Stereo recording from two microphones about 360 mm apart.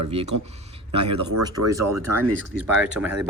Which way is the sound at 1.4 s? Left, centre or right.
Centre.